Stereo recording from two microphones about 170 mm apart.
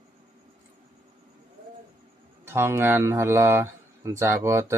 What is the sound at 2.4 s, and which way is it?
Speech, 15° right (ahead or behind).